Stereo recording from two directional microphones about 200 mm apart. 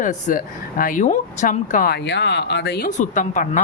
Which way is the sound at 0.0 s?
40° left (ahead or behind).